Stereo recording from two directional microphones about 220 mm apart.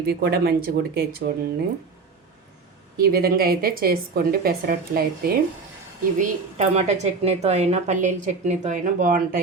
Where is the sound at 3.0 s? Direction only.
45° right (ahead or behind).